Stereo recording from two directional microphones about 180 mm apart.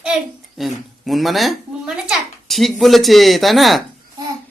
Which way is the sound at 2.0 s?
Centre (ahead or behind).